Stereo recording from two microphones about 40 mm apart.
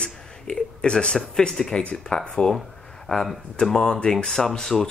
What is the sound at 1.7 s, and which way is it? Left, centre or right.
Speech, left.